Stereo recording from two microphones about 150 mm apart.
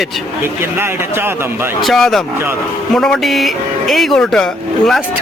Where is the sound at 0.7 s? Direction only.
15° right (ahead or behind).